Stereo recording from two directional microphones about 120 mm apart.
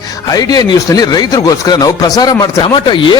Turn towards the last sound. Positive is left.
turn(degrees=40)  # may be behind; listen again after turning